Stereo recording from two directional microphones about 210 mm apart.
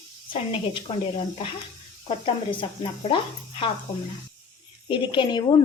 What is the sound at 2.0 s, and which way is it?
A woman's voice, 25° left (ahead or behind).